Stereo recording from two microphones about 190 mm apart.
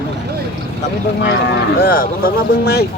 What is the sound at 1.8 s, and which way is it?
Speech, 50° left (ahead or behind).